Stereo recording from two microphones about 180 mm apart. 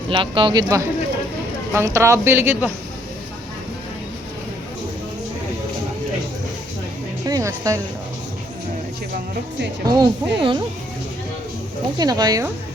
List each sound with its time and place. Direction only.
0.1 s a woman's voice: 25° right (ahead or behind); by 2.7 s 10° right (ahead or behind)
7.3 s music: 20° right (ahead or behind)
9.9 s speech: 25° right (ahead or behind)
11.9 s speech: 20° right (ahead or behind)